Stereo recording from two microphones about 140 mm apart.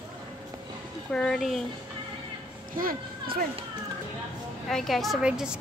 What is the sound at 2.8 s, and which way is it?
Speech, 90° right.